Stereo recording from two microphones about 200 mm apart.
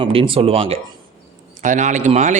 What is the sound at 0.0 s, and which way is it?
A man's voice, 25° right (ahead or behind).